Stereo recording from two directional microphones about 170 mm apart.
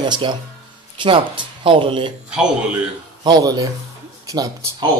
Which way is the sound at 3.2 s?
25° right (ahead or behind).